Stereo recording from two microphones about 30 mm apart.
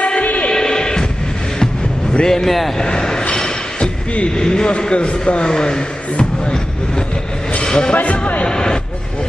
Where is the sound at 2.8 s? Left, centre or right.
Left.